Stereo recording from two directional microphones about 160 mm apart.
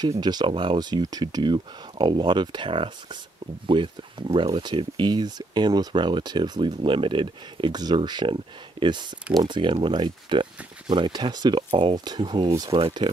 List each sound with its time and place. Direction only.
0.2 s speech: 25° right (ahead or behind)